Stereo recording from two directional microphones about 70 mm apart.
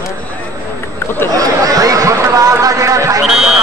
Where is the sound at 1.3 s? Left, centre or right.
Right.